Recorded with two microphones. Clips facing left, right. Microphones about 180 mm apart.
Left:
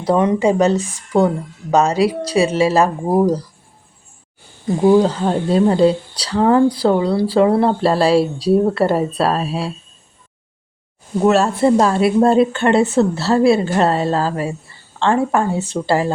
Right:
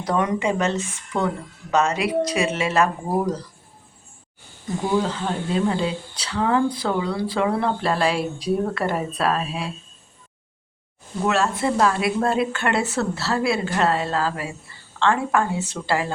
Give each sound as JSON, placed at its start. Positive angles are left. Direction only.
{"t": 0.0, "sound": "speech", "side_deg": 30}
{"t": 4.8, "sound": "speech", "side_deg": 40}
{"t": 11.2, "sound": "speech", "side_deg": 35}